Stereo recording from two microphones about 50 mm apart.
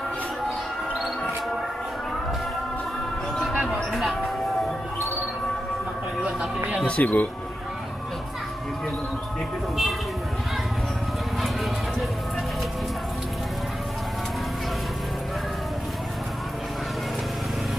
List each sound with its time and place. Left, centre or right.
3.9 s music: centre
7.0 s speech: left